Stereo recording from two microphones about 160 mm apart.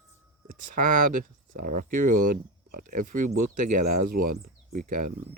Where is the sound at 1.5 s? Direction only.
60° right (ahead or behind).